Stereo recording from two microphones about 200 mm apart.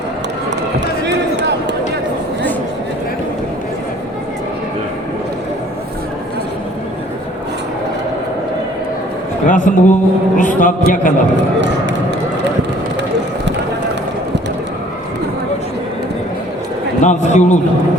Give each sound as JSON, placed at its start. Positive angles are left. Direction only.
{"t": 1.0, "sound": "basketball bounce", "side_deg": -60}
{"t": 9.5, "sound": "a man's voice", "side_deg": 40}
{"t": 17.0, "sound": "a man's voice", "side_deg": 35}